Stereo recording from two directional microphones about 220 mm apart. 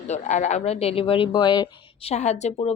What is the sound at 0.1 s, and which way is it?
Speech, 30° left (ahead or behind).